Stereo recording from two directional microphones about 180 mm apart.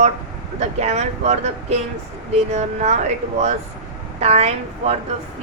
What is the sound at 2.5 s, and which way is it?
Speech, 40° right (ahead or behind).